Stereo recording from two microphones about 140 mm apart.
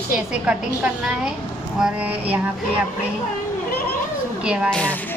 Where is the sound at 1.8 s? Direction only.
10° right (ahead or behind).